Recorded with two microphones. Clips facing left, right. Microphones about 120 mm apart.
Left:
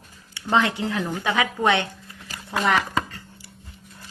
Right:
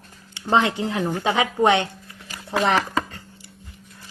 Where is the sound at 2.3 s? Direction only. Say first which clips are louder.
Even; 35° left (ahead or behind).